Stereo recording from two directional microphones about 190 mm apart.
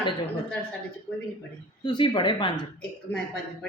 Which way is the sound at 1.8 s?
25° left (ahead or behind).